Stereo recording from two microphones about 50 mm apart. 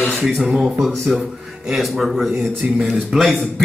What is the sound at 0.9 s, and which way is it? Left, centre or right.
Speech, centre.